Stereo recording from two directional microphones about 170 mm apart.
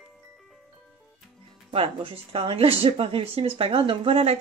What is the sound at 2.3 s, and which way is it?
Speech, 35° right (ahead or behind).